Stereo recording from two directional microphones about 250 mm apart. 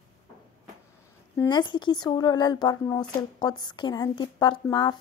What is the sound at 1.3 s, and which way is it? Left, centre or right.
Speech, centre.